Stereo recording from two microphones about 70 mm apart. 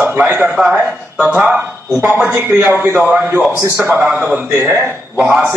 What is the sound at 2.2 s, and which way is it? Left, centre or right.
A man's voice, right.